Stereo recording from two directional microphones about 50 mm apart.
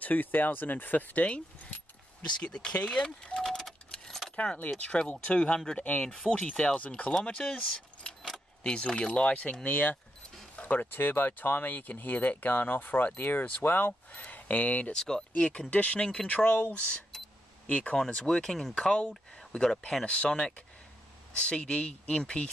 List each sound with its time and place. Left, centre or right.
0.0 s speech: left
2.4 s speech: left
3.4 s keys jangling: centre
4.7 s speech: left
6.2 s speech: left
14.1 s speech: left
14.9 s speech: centre
15.7 s speech: left
17.9 s speech: centre
20.1 s speech: left